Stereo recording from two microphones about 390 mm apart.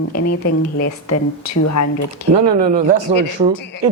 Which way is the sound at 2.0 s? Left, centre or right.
Right.